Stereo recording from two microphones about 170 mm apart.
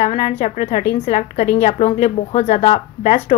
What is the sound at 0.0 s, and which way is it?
A woman's voice, 40° left (ahead or behind).